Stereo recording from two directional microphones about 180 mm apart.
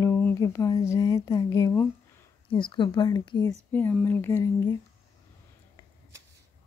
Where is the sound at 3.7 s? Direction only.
10° left (ahead or behind).